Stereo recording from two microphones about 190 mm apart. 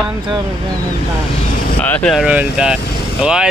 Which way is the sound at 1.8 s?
5° left (ahead or behind).